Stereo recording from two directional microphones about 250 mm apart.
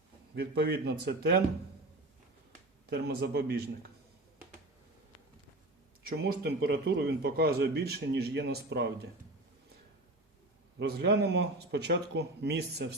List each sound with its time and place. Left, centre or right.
0.3 s speech: right
2.9 s speech: right
6.1 s speech: right
10.8 s speech: right